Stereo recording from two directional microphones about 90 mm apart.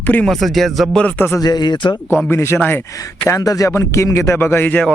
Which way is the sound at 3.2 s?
40° left (ahead or behind).